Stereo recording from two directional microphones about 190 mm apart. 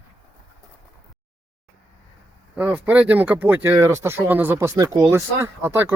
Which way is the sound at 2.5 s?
10° right (ahead or behind).